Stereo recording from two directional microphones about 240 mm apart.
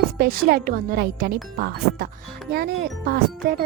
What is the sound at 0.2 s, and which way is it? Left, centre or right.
Speech, right.